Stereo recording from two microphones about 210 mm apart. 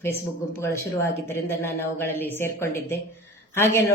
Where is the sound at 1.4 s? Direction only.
10° left (ahead or behind).